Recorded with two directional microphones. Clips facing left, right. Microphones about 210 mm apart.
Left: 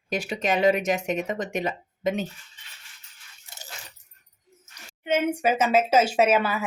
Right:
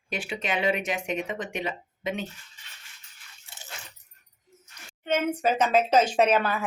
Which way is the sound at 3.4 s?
40° left (ahead or behind).